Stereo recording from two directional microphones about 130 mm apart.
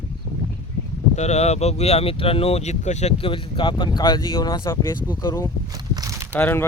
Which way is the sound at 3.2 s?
40° left (ahead or behind).